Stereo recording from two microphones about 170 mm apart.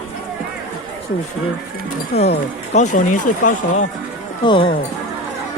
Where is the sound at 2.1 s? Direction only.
40° left (ahead or behind).